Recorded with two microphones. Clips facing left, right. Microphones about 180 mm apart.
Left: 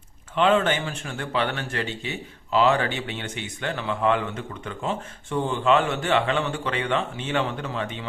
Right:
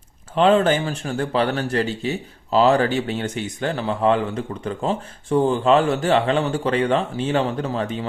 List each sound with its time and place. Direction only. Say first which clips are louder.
0.3 s a man's voice: right 4 dB; 35° right (ahead or behind)